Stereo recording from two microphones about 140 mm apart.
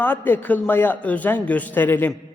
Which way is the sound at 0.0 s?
15° left (ahead or behind).